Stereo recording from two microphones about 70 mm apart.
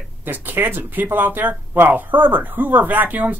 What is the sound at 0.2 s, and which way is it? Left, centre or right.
Speech, right.